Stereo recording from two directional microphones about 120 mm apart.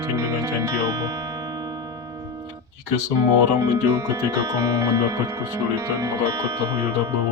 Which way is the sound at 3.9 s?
25° right (ahead or behind).